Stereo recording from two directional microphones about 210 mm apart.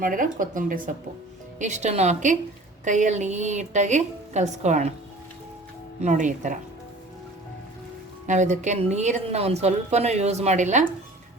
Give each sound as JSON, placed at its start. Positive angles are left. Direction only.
{"t": 0.0, "sound": "a woman's voice", "side_deg": -40}
{"t": 6.0, "sound": "a woman's voice", "side_deg": -35}
{"t": 8.3, "sound": "a woman's voice", "side_deg": -35}